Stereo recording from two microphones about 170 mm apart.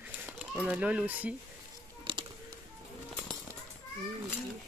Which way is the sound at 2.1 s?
30° right (ahead or behind).